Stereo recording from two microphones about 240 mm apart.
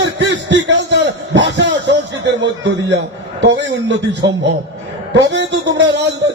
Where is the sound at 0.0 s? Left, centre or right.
Right.